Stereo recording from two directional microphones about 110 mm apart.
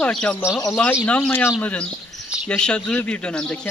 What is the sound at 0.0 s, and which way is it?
Speech, 10° left (ahead or behind).